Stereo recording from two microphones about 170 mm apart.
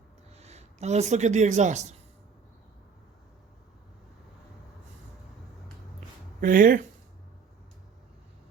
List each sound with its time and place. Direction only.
0.3 s speech: 40° right (ahead or behind)
6.4 s speech: 55° right (ahead or behind)